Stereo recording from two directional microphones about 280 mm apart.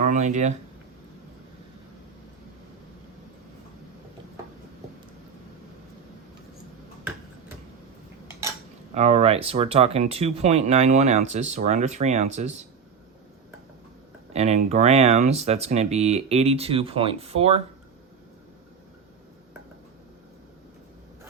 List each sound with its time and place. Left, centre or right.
0.0 s a sound: right
9.0 s speech: right
14.3 s speech: right